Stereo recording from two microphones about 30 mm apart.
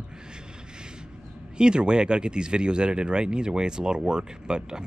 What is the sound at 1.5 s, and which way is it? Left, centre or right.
Speech, right.